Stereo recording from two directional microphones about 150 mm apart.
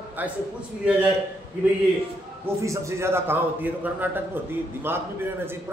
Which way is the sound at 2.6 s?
20° right (ahead or behind).